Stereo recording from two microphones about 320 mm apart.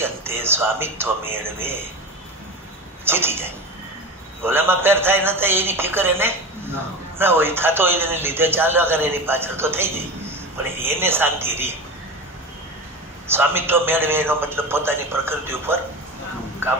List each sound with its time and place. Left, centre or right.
0.0 s a man's voice: centre
3.1 s a man's voice: centre
13.3 s a man's voice: centre